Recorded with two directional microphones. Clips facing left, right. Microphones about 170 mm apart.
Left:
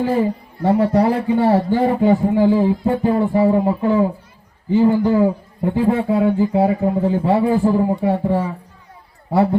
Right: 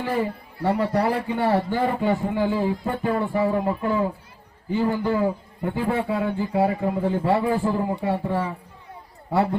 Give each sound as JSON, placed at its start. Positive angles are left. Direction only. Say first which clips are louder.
{"t": 0.0, "sound": "a man's voice", "louder": "left 7 dB", "side_deg": 30}